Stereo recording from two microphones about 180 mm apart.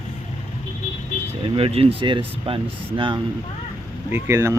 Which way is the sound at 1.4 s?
30° right (ahead or behind).